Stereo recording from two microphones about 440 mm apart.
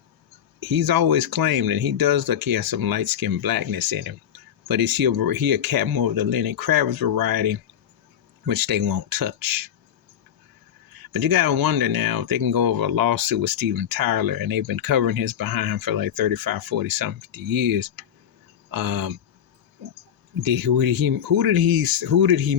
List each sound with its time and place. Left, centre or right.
0.6 s speech: right
11.1 s speech: right
20.4 s speech: right